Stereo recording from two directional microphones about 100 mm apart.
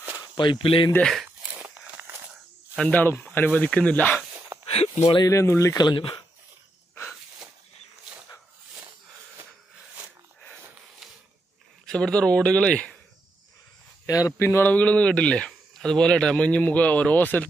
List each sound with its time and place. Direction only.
0.2 s speech: 55° left (ahead or behind)
1.2 s a sound: 15° right (ahead or behind)
2.8 s speech: 15° left (ahead or behind)
4.6 s speech: 75° left (ahead or behind)
5.3 s speech: 30° left (ahead or behind)
5.8 s speech: 55° left (ahead or behind)
11.0 s a sound: centre (ahead or behind)
11.8 s speech: 10° left (ahead or behind)
14.0 s speech: 35° left (ahead or behind); by 17.5 s 15° left (ahead or behind)